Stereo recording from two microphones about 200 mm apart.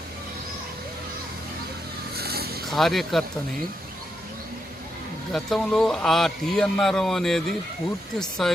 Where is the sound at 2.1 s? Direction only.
50° right (ahead or behind).